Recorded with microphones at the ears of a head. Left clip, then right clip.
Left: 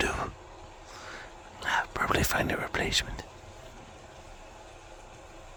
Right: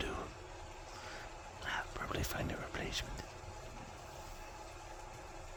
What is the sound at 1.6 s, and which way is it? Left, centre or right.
Speech, left.